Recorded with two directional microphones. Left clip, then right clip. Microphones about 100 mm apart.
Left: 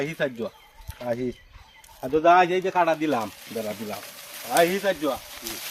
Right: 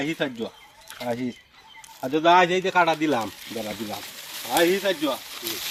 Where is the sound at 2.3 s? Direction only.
90° right.